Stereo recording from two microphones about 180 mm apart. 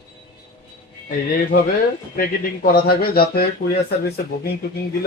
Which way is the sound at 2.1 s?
55° left (ahead or behind).